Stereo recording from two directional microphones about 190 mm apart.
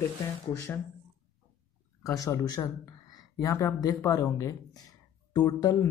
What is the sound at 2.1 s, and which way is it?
A man's voice, 15° left (ahead or behind).